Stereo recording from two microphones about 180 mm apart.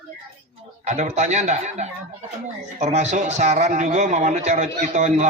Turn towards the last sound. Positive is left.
turn(degrees=-40)  # may be behind; listen again after turning